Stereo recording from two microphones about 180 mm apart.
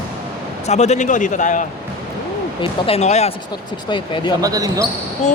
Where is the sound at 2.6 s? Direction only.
35° left (ahead or behind).